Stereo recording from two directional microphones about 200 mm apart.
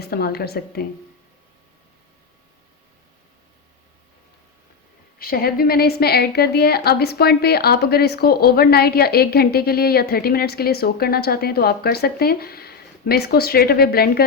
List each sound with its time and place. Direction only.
0.0 s speech: 50° left (ahead or behind)
5.2 s a woman's voice: 50° left (ahead or behind)